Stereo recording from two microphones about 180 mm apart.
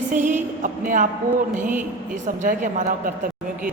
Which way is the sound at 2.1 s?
45° right (ahead or behind).